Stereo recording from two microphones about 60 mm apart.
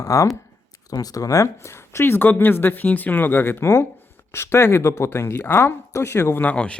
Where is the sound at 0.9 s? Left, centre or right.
Left.